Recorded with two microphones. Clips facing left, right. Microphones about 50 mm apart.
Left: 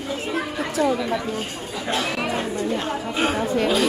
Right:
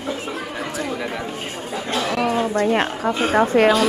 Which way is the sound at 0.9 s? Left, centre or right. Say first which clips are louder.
Left 2 dB; centre.